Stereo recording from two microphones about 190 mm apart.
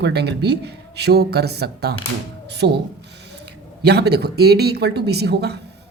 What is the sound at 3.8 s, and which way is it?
Speech, 60° right (ahead or behind).